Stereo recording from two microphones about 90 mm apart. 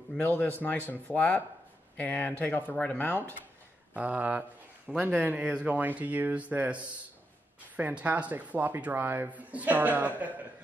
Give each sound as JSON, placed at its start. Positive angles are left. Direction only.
{"t": 0.2, "sound": "speech", "side_deg": 20}
{"t": 3.9, "sound": "a man's voice", "side_deg": -15}